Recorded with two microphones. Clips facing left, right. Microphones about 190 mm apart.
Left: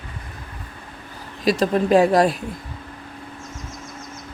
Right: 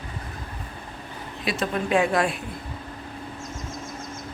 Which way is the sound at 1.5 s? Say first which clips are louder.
Left 8 dB; 40° left (ahead or behind).